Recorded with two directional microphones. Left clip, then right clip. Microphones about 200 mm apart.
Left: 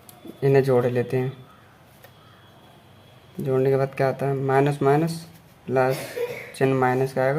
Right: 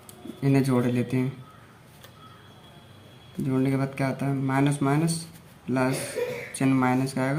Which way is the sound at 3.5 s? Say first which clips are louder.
Left 7 dB; 30° left (ahead or behind).